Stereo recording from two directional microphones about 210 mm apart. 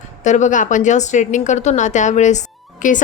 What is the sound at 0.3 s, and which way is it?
A woman's voice, 35° left (ahead or behind).